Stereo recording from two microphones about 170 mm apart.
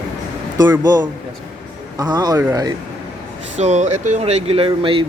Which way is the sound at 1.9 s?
25° right (ahead or behind).